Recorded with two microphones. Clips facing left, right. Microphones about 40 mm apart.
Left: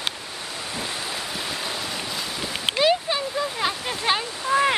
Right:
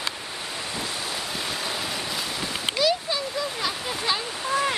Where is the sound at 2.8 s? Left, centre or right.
Left.